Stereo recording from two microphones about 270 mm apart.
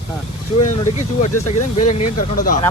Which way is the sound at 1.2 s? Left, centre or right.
Left.